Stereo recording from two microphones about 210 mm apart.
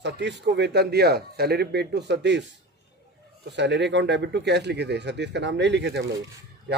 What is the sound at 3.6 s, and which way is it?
Speech, 55° right (ahead or behind).